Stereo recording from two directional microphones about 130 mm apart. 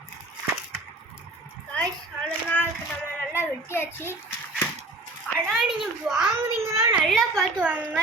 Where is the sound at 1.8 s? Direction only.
10° left (ahead or behind).